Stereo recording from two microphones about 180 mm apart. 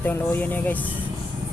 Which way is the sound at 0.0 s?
10° left (ahead or behind).